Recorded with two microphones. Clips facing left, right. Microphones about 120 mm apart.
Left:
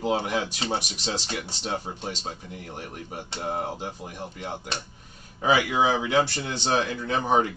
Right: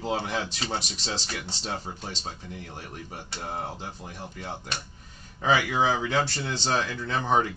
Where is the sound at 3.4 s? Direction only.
15° left (ahead or behind).